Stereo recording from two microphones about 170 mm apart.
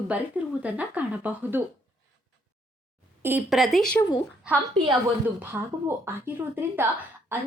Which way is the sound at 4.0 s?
20° left (ahead or behind).